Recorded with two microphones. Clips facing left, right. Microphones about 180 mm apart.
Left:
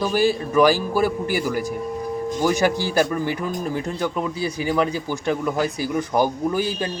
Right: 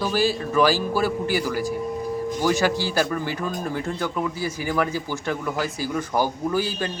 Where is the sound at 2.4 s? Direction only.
15° left (ahead or behind).